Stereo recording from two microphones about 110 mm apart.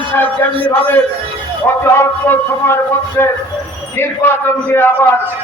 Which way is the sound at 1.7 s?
20° left (ahead or behind).